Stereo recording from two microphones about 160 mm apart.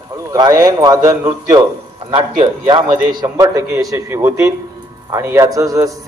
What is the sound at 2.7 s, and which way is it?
A man's voice, 30° right (ahead or behind).